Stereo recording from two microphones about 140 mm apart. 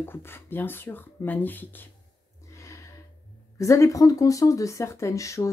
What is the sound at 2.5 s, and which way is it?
Gasp, 20° left (ahead or behind).